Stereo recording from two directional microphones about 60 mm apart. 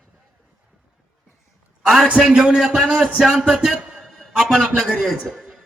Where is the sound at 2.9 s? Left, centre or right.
Right.